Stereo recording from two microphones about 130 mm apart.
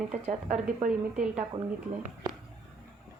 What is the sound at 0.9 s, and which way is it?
Speech, 5° right (ahead or behind).